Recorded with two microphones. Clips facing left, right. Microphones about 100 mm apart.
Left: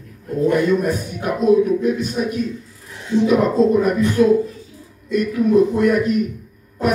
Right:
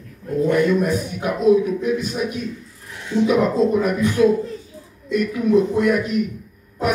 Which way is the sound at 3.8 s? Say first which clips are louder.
Left 2 dB; 40° left (ahead or behind).